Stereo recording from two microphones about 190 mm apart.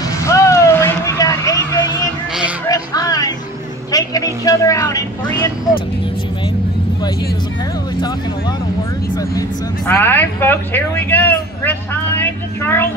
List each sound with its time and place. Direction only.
0.2 s vehicle: 15° left (ahead or behind)
2.7 s music: 20° left (ahead or behind)
3.9 s vehicle: 20° left (ahead or behind)
9.4 s speech: 10° left (ahead or behind)
12.2 s a sound: 10° left (ahead or behind)